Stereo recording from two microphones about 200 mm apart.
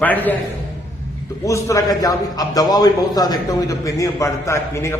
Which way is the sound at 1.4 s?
15° left (ahead or behind).